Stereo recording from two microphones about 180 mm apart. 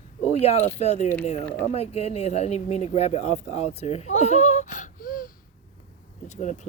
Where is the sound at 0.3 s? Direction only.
35° left (ahead or behind).